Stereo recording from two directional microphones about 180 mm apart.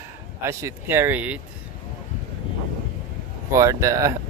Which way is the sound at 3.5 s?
15° right (ahead or behind).